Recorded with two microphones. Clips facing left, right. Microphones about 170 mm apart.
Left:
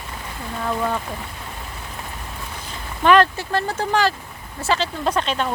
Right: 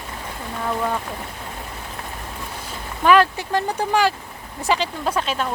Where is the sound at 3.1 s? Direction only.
10° right (ahead or behind).